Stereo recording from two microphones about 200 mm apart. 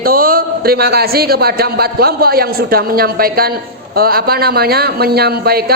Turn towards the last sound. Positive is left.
turn(degrees=-50)  # may be behind; listen again after turning